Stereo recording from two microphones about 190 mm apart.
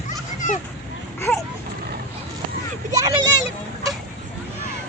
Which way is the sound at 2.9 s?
20° right (ahead or behind).